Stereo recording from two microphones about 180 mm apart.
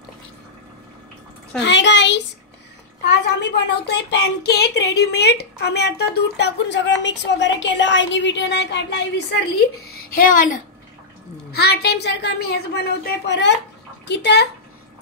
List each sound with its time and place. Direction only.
1.6 s a sound: 80° left
3.1 s a woman's voice: 70° left (ahead or behind)
9.9 s speech: 50° left (ahead or behind)
11.5 s a woman's voice: 65° left (ahead or behind)